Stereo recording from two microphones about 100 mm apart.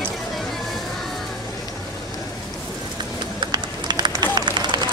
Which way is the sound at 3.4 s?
45° right (ahead or behind).